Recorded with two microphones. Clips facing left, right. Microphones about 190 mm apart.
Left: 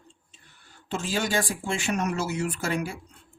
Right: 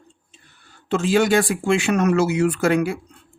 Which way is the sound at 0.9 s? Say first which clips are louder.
Right 10 dB; 75° right (ahead or behind).